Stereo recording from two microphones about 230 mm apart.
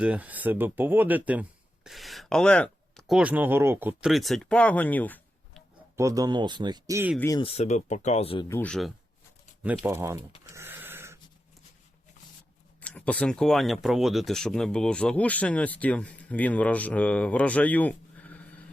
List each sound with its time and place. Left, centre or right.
0.0 s speech: centre
6.0 s speech: centre
7.2 s speech: centre
7.4 s speech: left
8.4 s speech: centre
9.6 s speech: centre
10.4 s dog: centre
12.8 s speech: centre